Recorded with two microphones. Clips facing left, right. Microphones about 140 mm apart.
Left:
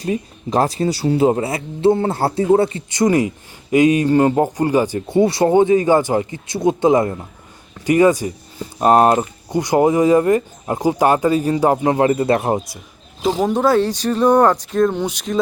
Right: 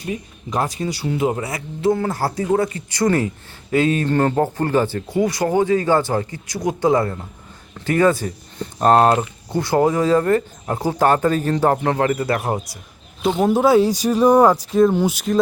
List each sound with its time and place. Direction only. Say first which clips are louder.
0.0 s speech: left 6 dB; 35° left (ahead or behind)
13.4 s speech: right 2 dB; 5° right (ahead or behind)